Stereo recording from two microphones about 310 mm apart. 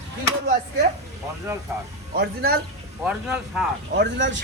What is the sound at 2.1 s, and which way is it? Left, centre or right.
Speech, right.